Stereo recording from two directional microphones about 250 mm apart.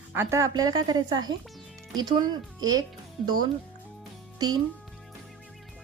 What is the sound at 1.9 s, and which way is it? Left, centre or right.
Speech, centre.